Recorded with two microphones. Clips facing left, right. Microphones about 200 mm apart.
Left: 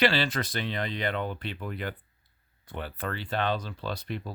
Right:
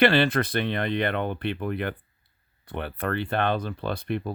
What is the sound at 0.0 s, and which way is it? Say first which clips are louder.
Speech: right 6 dB; 55° right (ahead or behind).